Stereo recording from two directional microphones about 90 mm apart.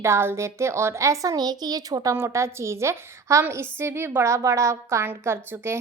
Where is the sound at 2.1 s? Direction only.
30° right (ahead or behind).